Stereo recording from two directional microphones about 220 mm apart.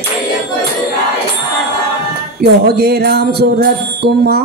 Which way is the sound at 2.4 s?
45° right (ahead or behind).